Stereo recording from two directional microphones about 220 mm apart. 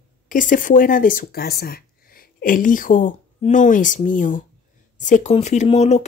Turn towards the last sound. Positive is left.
turn(degrees=30)  # may be behind; listen again after turning